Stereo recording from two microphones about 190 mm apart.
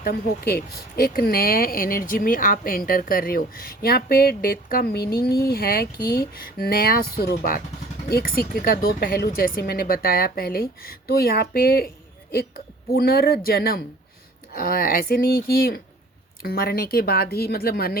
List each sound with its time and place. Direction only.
0.0 s speech: 55° left (ahead or behind)
12.9 s speech: 55° left (ahead or behind)